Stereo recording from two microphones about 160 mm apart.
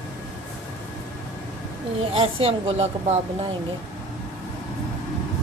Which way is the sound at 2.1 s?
35° right (ahead or behind).